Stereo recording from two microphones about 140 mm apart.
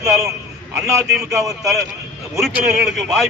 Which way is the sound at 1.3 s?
25° right (ahead or behind).